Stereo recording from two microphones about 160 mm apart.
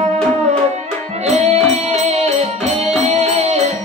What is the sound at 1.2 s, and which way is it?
Music, 40° right (ahead or behind).